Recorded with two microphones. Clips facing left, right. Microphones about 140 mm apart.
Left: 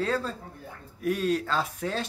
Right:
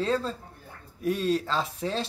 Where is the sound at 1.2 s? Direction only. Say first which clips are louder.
Right 1 dB; 35° right (ahead or behind).